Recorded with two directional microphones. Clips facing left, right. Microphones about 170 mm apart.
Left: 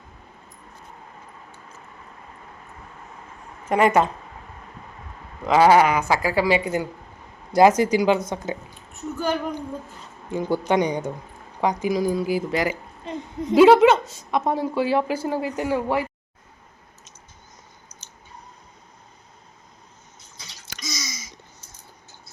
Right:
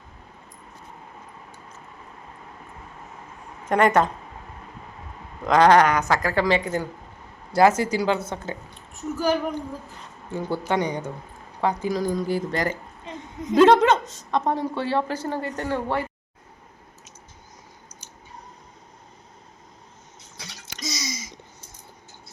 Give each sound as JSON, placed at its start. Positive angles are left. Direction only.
{"t": 3.7, "sound": "a woman's voice", "side_deg": 5}
{"t": 5.5, "sound": "a woman's voice", "side_deg": 5}
{"t": 8.9, "sound": "a woman's voice", "side_deg": -5}
{"t": 10.3, "sound": "a woman's voice", "side_deg": 15}
{"t": 13.1, "sound": "a woman's voice", "side_deg": 30}
{"t": 13.6, "sound": "a woman's voice", "side_deg": 5}
{"t": 20.7, "sound": "a sound", "side_deg": -35}